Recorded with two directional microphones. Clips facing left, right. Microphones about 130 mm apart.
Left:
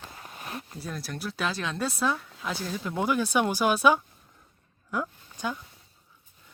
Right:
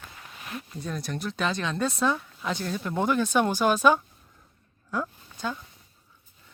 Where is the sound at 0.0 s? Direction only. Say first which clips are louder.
Left 2 dB; 35° left (ahead or behind).